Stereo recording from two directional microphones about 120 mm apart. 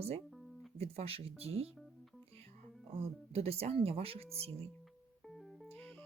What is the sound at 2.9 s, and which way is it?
Speech, 55° right (ahead or behind).